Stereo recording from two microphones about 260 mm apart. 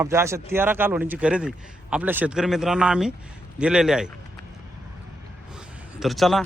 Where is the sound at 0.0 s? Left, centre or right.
Centre.